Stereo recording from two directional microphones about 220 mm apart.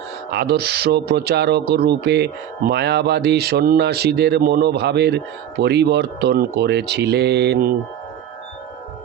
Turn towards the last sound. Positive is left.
turn(degrees=-45)  # may be behind; listen again after turning